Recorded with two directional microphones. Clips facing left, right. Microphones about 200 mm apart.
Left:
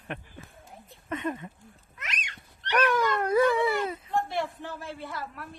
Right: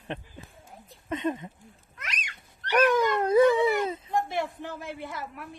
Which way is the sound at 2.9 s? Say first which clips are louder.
Right 2 dB; 20° right (ahead or behind).